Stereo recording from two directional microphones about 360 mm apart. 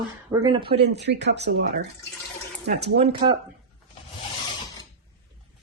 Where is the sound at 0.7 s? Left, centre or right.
Right.